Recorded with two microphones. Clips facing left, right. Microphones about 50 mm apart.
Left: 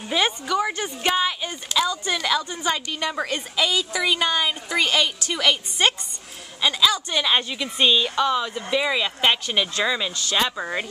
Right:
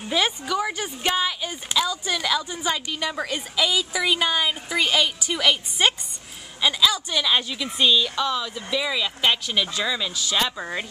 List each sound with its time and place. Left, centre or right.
0.5 s a woman's voice: centre
7.1 s speech: centre